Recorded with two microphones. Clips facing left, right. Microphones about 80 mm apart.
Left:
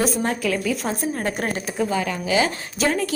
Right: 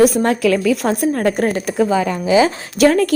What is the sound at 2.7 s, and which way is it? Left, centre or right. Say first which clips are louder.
Speech: right 10 dB; right.